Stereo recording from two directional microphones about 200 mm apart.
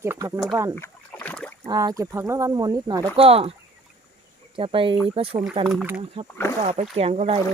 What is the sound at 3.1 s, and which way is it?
Speech, 30° right (ahead or behind).